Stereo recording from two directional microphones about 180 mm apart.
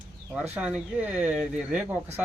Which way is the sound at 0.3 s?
10° right (ahead or behind).